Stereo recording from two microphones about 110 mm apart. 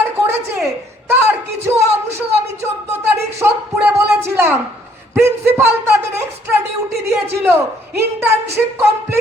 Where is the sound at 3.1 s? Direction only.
20° right (ahead or behind).